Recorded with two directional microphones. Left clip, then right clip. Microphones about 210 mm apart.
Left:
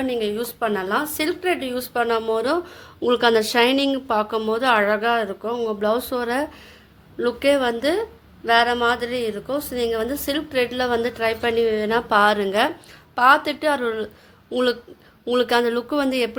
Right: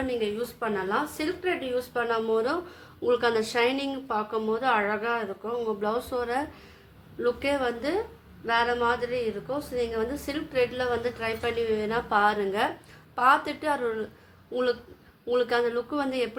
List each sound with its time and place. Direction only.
0.0 s a woman's voice: 40° left (ahead or behind)